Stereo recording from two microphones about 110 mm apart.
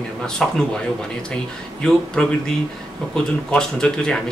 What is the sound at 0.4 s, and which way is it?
Speech, 5° left (ahead or behind).